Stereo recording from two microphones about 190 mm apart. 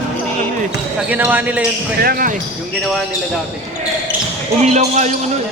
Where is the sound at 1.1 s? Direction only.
10° right (ahead or behind).